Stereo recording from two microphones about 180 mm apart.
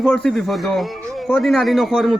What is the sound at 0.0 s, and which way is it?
A man's voice, 5° left (ahead or behind).